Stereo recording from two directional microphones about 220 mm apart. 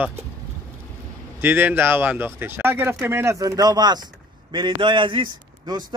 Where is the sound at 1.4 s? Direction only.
10° right (ahead or behind).